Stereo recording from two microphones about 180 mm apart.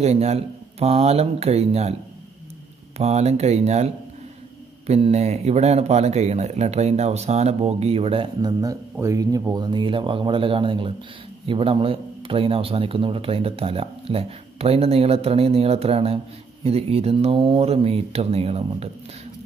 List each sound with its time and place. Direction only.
0.0 s a man's voice: 35° right (ahead or behind)
3.0 s a man's voice: 35° right (ahead or behind)